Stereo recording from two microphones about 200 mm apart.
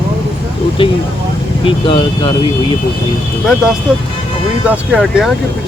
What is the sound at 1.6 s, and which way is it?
Speech, 25° left (ahead or behind).